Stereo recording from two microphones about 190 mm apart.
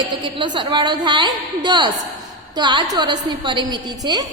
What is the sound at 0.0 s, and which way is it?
A woman's voice, 25° right (ahead or behind).